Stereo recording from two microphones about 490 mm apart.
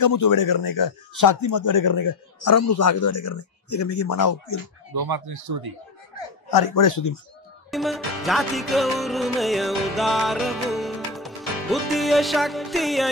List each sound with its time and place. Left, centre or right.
0.0 s a man's voice: left
4.9 s speech: right
6.5 s a man's voice: left
7.7 s music: centre